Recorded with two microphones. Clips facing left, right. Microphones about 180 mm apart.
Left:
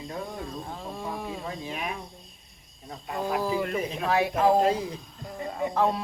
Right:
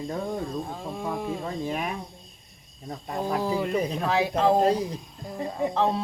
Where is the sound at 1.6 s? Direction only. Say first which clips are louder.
Right 7 dB; 45° right (ahead or behind).